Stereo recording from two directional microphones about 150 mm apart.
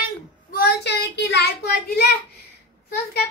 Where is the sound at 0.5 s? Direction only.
90° left.